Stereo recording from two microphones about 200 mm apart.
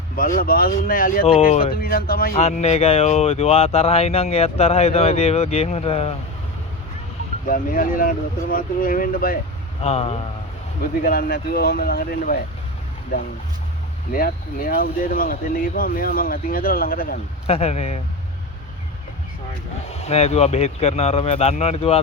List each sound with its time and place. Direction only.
0.3 s speech: 45° left (ahead or behind)
1.2 s speech: 30° left (ahead or behind)
1.7 s speech: 45° left (ahead or behind)
2.3 s speech: 35° left (ahead or behind)
7.4 s speech: 45° left (ahead or behind)
9.8 s speech: 30° left (ahead or behind)
11.0 s speech: 50° left (ahead or behind)
14.1 s speech: 45° left (ahead or behind)
17.4 s speech: 30° left (ahead or behind)
19.9 s speech: 30° left (ahead or behind)